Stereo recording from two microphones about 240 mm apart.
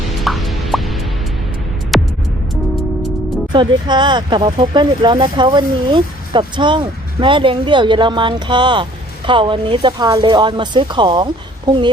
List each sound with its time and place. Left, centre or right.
0.1 s music: centre
1.9 s music: centre
3.5 s speech: centre